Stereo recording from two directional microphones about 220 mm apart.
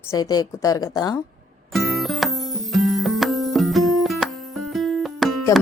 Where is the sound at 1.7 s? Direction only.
Centre (ahead or behind).